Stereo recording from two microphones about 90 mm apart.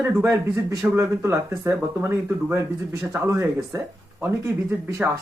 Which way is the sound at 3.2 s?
35° right (ahead or behind).